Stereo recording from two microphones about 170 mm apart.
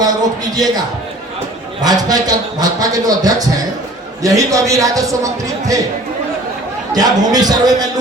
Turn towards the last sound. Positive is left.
turn(degrees=-20)  # may be behind; listen again after turning